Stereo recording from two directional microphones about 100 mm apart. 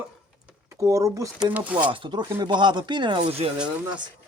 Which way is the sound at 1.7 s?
60° right (ahead or behind).